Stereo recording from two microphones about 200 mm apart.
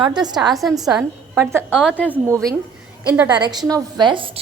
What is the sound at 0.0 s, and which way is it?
Speech, 20° right (ahead or behind).